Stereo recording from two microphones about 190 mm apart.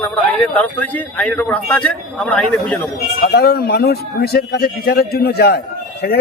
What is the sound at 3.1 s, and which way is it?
A man's voice, 55° left (ahead or behind).